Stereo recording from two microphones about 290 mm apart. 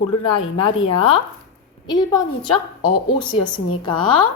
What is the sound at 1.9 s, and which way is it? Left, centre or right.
Speech, centre.